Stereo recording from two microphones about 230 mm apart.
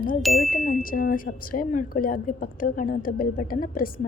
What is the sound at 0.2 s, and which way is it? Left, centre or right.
Ding, centre.